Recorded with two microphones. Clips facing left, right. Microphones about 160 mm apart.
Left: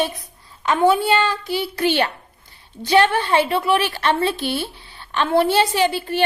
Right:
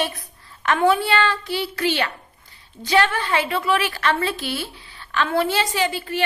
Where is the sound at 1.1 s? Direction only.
15° left (ahead or behind).